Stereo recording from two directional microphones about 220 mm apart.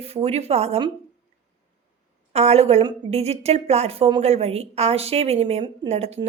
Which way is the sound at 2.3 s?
30° right (ahead or behind).